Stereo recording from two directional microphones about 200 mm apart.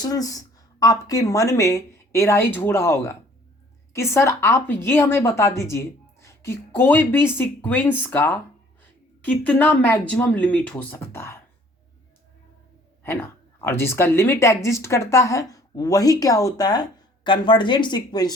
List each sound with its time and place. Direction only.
0.0 s speech: 20° left (ahead or behind)
13.6 s speech: 10° left (ahead or behind)